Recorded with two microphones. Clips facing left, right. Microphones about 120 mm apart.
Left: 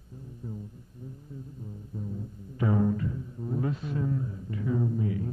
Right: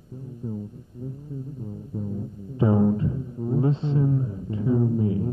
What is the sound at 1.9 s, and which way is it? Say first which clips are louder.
Music: right 6 dB; 25° right (ahead or behind).